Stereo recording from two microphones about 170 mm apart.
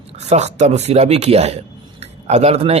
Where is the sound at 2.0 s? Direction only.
40° right (ahead or behind).